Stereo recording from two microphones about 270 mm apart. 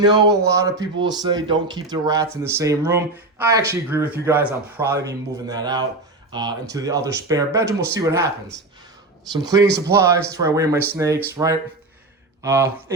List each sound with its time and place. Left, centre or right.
0.0 s speech: centre
9.3 s speech: centre